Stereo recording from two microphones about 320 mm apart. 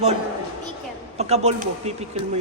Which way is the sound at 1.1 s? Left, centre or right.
Centre.